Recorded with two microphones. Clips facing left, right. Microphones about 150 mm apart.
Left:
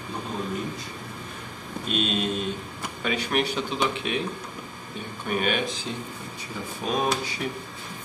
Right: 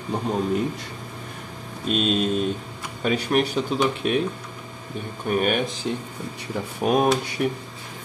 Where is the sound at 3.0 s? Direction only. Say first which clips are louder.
Right 5 dB; 40° right (ahead or behind).